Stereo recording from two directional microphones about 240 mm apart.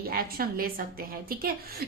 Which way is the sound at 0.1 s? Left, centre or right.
Right.